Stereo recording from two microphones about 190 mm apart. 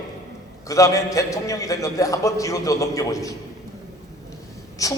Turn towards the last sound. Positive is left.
turn(degrees=15)  # may be behind; listen again after turning